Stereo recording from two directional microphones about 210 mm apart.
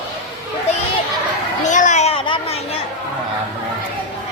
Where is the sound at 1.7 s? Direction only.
35° left (ahead or behind).